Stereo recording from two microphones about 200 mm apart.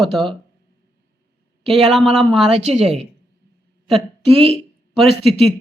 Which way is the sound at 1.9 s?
Centre (ahead or behind).